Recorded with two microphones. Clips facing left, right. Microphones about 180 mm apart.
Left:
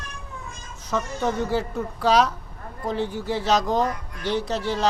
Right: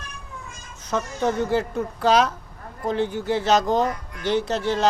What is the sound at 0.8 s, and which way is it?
Speech, centre (ahead or behind).